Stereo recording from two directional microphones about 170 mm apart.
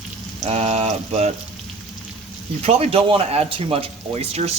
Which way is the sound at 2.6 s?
40° right (ahead or behind).